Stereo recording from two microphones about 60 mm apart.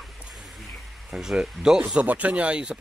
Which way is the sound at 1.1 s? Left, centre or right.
Centre.